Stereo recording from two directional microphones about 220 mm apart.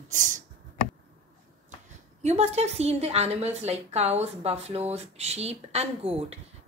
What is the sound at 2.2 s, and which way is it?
A woman's voice, 30° right (ahead or behind).